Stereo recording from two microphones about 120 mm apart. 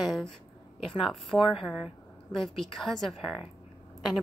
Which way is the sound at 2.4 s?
Centre (ahead or behind).